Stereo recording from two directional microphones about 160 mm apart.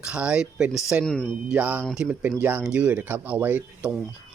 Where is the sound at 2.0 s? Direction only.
10° right (ahead or behind).